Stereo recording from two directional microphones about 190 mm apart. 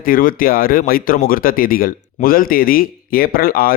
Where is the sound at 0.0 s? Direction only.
50° left (ahead or behind).